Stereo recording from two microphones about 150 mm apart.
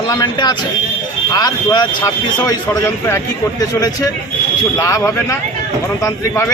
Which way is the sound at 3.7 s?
25° left (ahead or behind).